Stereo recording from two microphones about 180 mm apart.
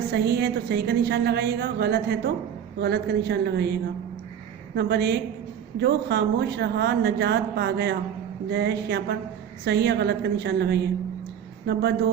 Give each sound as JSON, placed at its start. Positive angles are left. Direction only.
{"t": 0.1, "sound": "a woman's voice", "side_deg": -65}